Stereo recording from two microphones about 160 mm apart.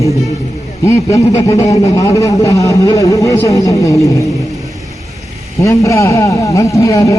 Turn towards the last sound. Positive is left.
turn(degrees=20)  # may be behind; listen again after turning